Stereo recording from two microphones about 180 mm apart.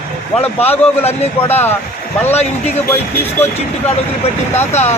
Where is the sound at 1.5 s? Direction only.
10° left (ahead or behind).